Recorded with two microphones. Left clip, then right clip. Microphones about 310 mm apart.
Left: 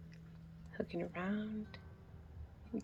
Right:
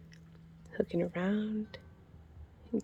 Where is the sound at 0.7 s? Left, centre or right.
Right.